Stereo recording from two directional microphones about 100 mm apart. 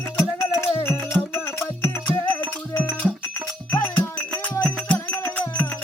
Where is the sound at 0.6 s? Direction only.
25° left (ahead or behind).